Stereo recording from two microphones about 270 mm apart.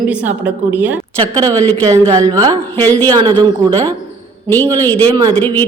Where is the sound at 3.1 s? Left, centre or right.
Centre.